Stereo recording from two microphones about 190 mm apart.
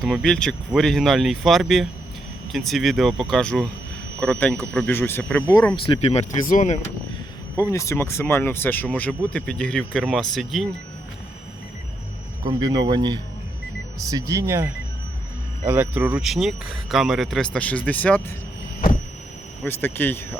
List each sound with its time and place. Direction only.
0.0 s speech: centre (ahead or behind)
5.8 s speech: 25° left (ahead or behind)
7.5 s speech: 15° left (ahead or behind)
12.5 s speech: 20° right (ahead or behind); by 18.2 s 10° left (ahead or behind)
19.6 s speech: 10° left (ahead or behind)